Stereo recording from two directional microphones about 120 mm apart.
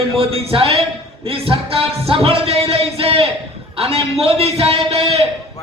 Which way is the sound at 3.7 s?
55° right (ahead or behind).